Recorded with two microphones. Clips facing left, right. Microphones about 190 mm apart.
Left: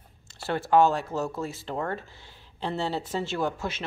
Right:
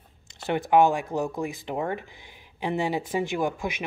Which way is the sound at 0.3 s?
15° right (ahead or behind).